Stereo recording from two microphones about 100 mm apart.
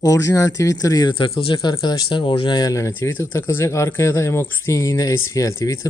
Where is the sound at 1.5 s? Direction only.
45° left (ahead or behind).